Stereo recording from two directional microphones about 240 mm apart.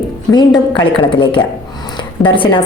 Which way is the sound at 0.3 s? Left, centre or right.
Centre.